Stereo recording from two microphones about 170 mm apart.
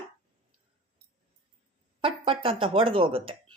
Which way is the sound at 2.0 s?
30° right (ahead or behind).